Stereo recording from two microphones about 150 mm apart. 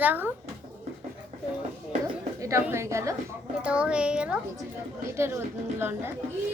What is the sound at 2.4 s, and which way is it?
Speech, 20° right (ahead or behind).